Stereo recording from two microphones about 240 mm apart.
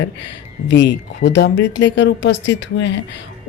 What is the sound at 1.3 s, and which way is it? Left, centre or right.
Speech, left.